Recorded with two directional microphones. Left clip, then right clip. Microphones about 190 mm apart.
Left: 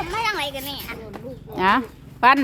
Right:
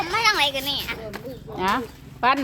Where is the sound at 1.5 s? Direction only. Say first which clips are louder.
Left 5 dB; 35° left (ahead or behind).